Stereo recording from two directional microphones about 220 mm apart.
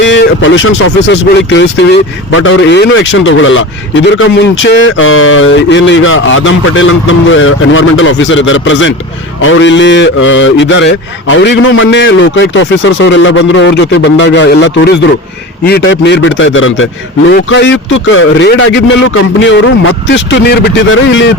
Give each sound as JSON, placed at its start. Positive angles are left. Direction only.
{"t": 0.0, "sound": "speech", "side_deg": 55}